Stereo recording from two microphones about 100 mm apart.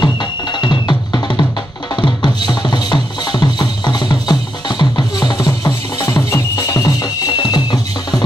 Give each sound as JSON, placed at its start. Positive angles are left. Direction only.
{"t": 0.0, "sound": "music", "side_deg": 45}